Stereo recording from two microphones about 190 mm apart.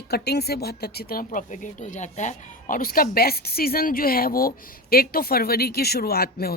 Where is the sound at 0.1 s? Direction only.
60° left (ahead or behind).